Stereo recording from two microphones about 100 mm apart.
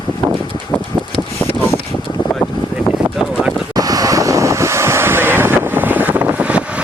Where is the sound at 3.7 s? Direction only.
40° right (ahead or behind); by 6.6 s 15° right (ahead or behind).